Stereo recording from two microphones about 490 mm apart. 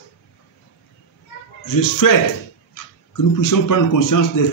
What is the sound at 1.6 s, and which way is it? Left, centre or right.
Speech, left.